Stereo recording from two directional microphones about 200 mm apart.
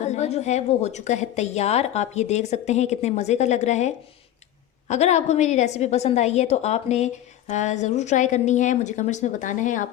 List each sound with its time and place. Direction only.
0.0 s a woman's voice: 35° left (ahead or behind)